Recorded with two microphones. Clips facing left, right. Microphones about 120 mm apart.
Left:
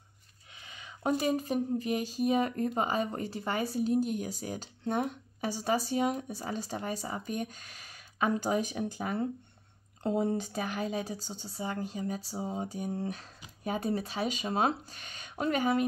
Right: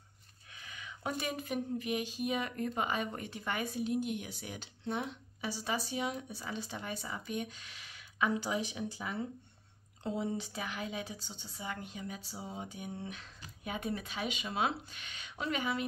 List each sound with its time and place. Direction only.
0.5 s speech: 25° left (ahead or behind); by 15.8 s 45° left (ahead or behind)